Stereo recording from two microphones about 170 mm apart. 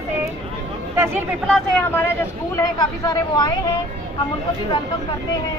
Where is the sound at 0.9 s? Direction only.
15° right (ahead or behind).